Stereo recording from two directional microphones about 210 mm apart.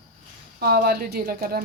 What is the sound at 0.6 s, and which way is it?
A woman's voice, 50° right (ahead or behind).